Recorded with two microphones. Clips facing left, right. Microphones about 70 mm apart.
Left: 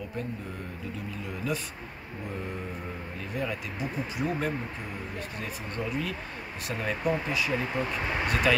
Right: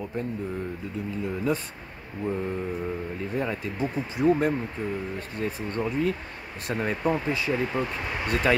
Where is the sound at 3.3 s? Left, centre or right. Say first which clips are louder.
Right 3 dB; right.